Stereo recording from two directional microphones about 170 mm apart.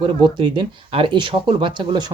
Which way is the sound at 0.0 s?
25° right (ahead or behind).